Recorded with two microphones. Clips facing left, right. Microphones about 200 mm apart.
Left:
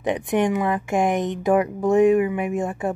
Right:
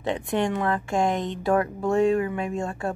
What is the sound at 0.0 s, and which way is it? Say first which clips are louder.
Speech: left 4 dB; 15° left (ahead or behind).